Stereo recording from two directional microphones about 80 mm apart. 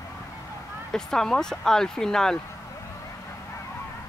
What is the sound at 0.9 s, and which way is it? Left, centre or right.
Speech, centre.